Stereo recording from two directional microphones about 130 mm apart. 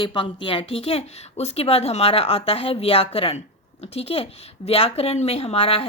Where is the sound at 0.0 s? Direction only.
40° left (ahead or behind).